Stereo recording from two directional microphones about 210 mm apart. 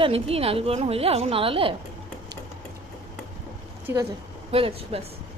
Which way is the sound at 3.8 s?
10° right (ahead or behind).